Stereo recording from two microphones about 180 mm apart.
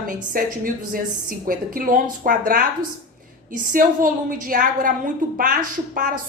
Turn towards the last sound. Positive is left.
turn(degrees=-50)  # may be behind; listen again after turning